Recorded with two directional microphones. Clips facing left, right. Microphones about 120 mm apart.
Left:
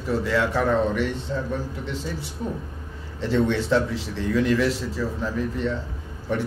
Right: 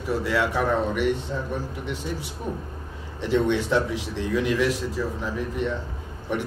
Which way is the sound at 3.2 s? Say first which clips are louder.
Even; 15° right (ahead or behind).